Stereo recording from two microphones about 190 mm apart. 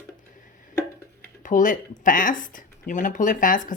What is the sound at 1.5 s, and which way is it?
Speech, 45° left (ahead or behind).